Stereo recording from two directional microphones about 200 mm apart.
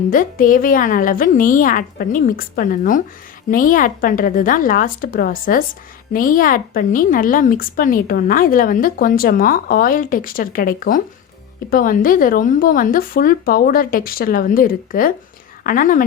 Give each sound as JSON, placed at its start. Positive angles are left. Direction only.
{"t": 0.1, "sound": "a woman's voice", "side_deg": 45}